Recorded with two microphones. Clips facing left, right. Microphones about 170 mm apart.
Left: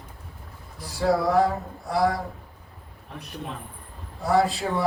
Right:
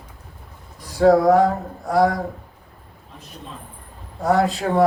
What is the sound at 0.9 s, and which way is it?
Speech, 50° right (ahead or behind).